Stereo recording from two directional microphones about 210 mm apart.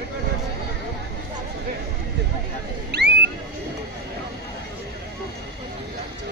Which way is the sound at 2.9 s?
50° right (ahead or behind).